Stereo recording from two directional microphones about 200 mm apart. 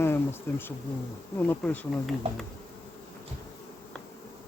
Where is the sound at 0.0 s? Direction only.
10° left (ahead or behind).